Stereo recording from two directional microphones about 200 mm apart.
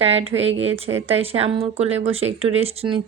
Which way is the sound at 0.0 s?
30° right (ahead or behind).